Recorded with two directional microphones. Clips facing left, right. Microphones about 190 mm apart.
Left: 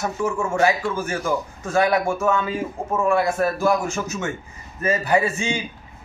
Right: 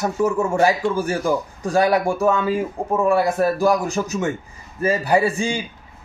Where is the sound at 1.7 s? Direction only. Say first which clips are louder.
Right 2 dB; 35° right (ahead or behind).